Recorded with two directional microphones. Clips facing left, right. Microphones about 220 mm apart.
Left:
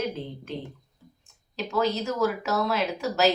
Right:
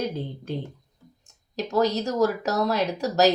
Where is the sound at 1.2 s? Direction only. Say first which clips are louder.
Right 3 dB; 40° right (ahead or behind).